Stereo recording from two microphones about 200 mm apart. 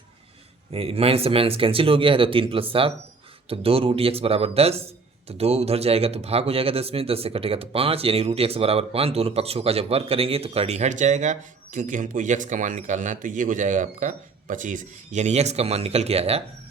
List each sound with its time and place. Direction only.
0.7 s speech: 30° right (ahead or behind)